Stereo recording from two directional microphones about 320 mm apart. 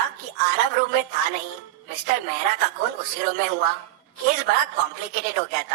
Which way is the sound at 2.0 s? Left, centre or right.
Right.